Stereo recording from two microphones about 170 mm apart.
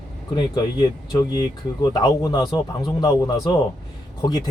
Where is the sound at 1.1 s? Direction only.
25° left (ahead or behind).